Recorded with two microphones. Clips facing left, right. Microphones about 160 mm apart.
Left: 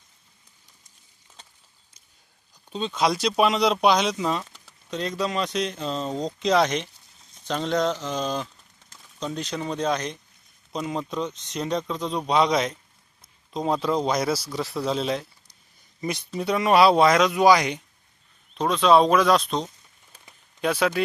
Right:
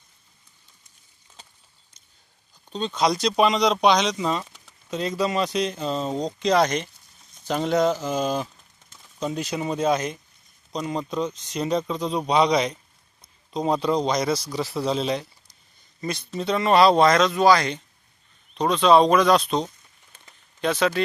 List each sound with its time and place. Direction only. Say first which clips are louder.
2.6 s speech: right 1 dB; 5° left (ahead or behind)
16.0 s speech: even; 15° left (ahead or behind)
18.5 s speech: right 1 dB; centre (ahead or behind)
20.1 s a sound: left 1 dB; 10° left (ahead or behind)